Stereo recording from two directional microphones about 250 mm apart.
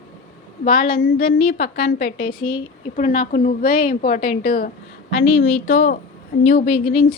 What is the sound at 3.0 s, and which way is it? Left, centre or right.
A woman's voice, left.